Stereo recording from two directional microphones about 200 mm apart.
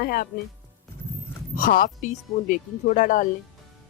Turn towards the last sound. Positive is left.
turn(degrees=40)  # may be behind; listen again after turning